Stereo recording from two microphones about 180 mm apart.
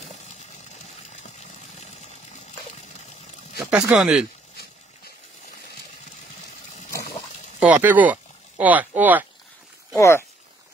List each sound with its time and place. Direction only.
1.4 s water: 40° left (ahead or behind)
3.5 s speech: 5° right (ahead or behind)
7.6 s speech: 10° right (ahead or behind)
9.9 s speech: 15° left (ahead or behind)